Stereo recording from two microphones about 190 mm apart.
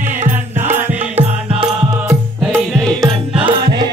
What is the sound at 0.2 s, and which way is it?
Music, 40° right (ahead or behind).